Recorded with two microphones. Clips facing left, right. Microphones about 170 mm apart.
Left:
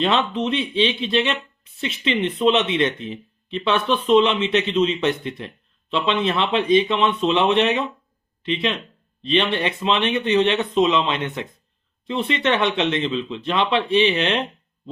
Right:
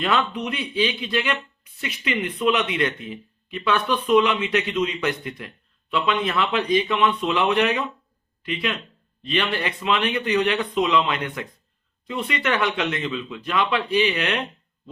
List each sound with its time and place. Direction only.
0.0 s speech: 25° left (ahead or behind)